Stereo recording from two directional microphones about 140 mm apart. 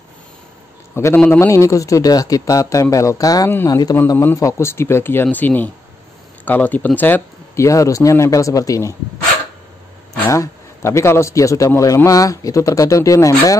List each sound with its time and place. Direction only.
0.9 s a man's voice: 15° left (ahead or behind)
10.2 s a man's voice: 20° left (ahead or behind)